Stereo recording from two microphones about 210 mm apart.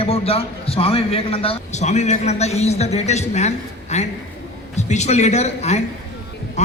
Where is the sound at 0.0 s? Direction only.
30° left (ahead or behind).